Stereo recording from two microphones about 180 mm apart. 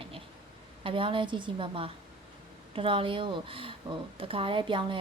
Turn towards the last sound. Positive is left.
turn(degrees=-25)  # may be behind; listen again after turning